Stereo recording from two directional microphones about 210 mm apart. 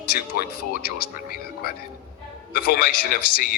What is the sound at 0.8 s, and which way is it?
Speech, 45° left (ahead or behind).